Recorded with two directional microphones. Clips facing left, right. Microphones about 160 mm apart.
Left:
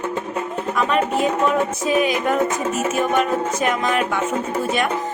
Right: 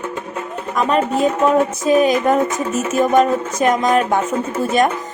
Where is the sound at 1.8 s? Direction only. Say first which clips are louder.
Right 6 dB; 40° right (ahead or behind).